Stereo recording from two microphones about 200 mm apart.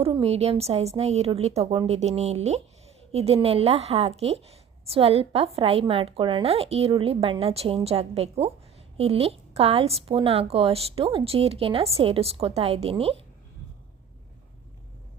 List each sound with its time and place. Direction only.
0.0 s a woman's voice: 30° right (ahead or behind)